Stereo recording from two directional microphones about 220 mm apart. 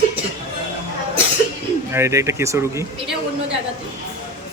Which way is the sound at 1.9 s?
10° right (ahead or behind).